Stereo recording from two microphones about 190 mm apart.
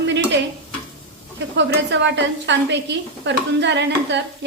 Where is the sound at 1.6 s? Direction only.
70° right (ahead or behind).